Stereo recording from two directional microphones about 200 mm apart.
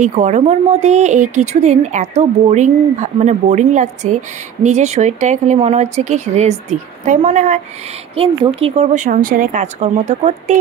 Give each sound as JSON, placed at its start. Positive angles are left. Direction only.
{"t": 0.0, "sound": "speech", "side_deg": -35}